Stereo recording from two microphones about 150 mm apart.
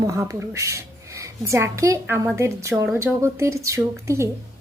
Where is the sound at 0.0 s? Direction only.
20° right (ahead or behind).